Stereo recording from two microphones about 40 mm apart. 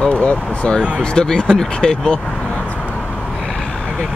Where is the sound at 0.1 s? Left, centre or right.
Left.